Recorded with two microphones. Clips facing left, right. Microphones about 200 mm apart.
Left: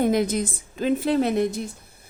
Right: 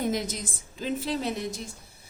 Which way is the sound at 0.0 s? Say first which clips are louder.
Left 8 dB; 60° left (ahead or behind).